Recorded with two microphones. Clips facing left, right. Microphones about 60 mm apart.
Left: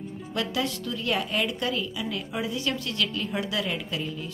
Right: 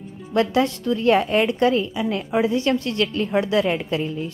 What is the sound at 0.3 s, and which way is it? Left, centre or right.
A woman's voice, right.